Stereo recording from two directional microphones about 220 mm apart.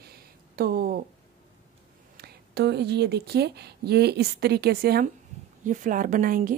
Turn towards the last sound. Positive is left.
turn(degrees=-40)  # may be behind; listen again after turning